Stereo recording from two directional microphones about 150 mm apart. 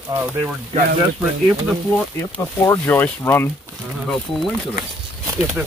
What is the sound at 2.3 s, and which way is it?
Speech, 20° left (ahead or behind).